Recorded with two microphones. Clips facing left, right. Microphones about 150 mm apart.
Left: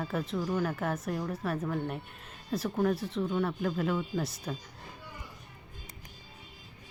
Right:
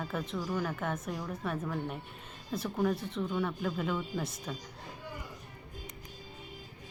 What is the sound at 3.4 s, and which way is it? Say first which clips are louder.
Speech: left 2 dB; centre (ahead or behind).